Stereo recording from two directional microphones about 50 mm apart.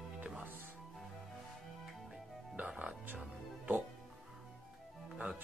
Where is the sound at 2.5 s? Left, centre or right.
Right.